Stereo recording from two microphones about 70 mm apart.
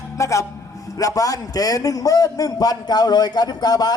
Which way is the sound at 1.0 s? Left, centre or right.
Left.